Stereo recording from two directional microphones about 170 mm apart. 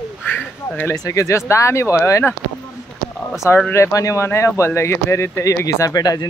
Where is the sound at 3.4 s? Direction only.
15° left (ahead or behind).